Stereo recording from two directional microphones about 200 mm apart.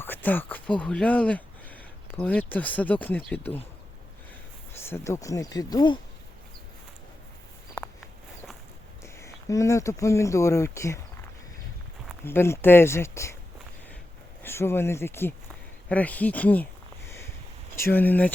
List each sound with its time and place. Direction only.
0.0 s speech: 10° left (ahead or behind)
4.8 s speech: 10° left (ahead or behind)
7.8 s a sound: 10° left (ahead or behind)
9.1 s speech: 15° left (ahead or behind)
12.2 s speech: 10° left (ahead or behind)
14.4 s speech: 10° left (ahead or behind)
17.7 s speech: 10° left (ahead or behind)